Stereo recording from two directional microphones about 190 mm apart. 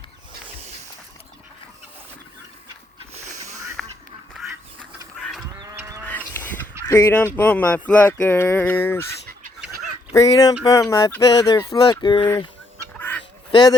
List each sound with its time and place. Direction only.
0.4 s a sound: 35° right (ahead or behind)
3.5 s a sound: 15° right (ahead or behind)
4.4 s duck: centre (ahead or behind)
5.1 s livestock: centre (ahead or behind)
5.5 s livestock: 20° right (ahead or behind)
6.1 s a sound: 10° left (ahead or behind)
10.1 s speech: 20° left (ahead or behind)
13.0 s duck: 10° left (ahead or behind)
13.5 s a man's voice: 20° left (ahead or behind)